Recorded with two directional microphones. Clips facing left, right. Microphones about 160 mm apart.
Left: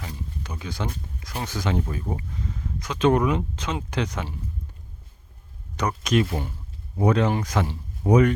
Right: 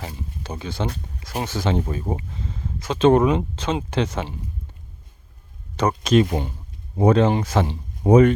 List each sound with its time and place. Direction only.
0.4 s speech: 30° right (ahead or behind)
5.7 s speech: 30° right (ahead or behind)